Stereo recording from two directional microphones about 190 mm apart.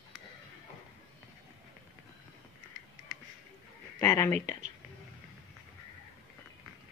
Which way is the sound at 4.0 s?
15° left (ahead or behind).